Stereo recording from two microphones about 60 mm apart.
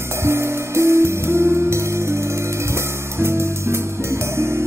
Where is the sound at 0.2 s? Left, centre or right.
Right.